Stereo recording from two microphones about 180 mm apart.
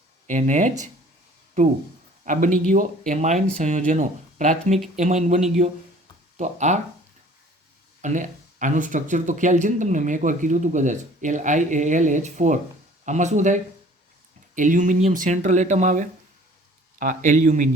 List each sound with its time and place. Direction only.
0.3 s speech: 45° right (ahead or behind)
2.2 s speech: 45° right (ahead or behind)
8.0 s speech: 45° right (ahead or behind)